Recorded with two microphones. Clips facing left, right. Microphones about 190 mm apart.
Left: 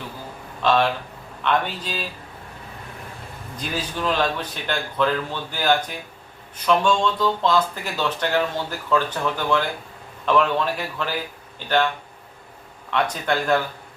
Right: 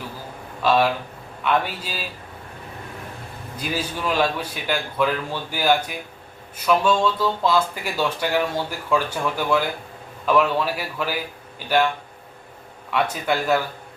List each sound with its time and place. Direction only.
0.6 s speech: 5° right (ahead or behind)
3.6 s speech: 10° right (ahead or behind)
12.9 s speech: 5° right (ahead or behind)